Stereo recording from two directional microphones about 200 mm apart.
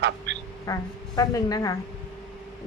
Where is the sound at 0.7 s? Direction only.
15° left (ahead or behind).